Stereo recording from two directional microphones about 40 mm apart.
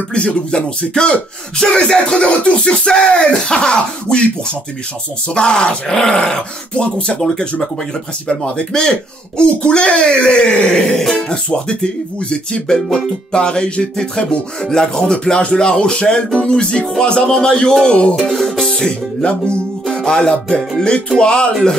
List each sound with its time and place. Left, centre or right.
0.1 s speech: left
5.3 s speech: left
8.3 s speech: left
10.9 s speech: centre
12.3 s speech: left
18.3 s music: centre
18.8 s music: left
20.1 s speech: centre